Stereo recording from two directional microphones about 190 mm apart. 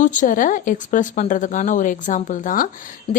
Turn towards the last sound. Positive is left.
turn(degrees=45)  # may be behind; listen again after turning